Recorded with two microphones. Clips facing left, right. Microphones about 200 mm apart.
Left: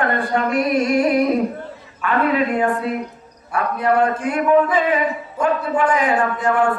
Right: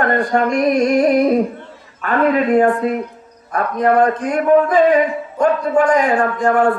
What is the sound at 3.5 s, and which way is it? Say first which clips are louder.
A man's voice: right 3 dB; 40° right (ahead or behind).